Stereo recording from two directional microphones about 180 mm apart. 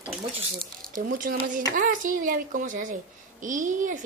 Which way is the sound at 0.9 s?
50° right (ahead or behind).